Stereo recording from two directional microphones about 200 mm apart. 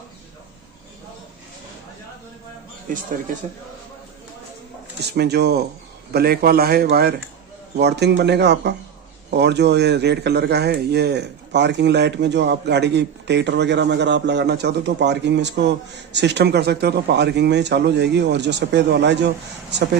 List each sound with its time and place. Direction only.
2.9 s speech: 40° right (ahead or behind)
5.0 s a man's voice: 55° right (ahead or behind)